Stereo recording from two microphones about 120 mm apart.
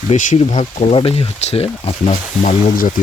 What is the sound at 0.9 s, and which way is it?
Speech, 55° left (ahead or behind).